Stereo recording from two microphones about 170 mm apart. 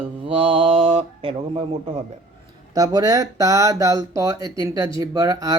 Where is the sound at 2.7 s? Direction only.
20° right (ahead or behind).